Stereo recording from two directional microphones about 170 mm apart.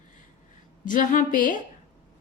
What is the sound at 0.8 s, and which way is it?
Speech, 50° left (ahead or behind).